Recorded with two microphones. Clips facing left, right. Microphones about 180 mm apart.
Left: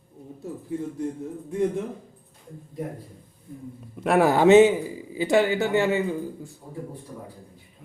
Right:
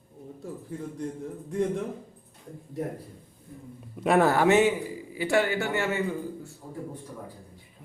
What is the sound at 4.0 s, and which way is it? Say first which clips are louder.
Speech: left 1 dB; centre (ahead or behind).